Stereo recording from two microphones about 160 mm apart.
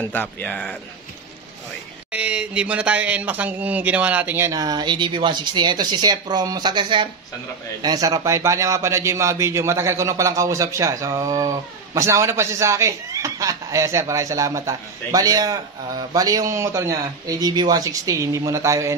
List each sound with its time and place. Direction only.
0.0 s speech: 10° left (ahead or behind)
2.1 s a man's voice: 10° right (ahead or behind)